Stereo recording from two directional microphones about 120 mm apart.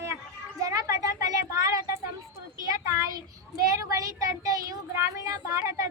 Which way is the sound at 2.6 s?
30° right (ahead or behind).